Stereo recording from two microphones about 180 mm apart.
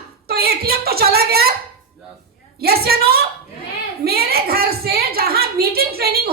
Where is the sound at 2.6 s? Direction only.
60° right (ahead or behind).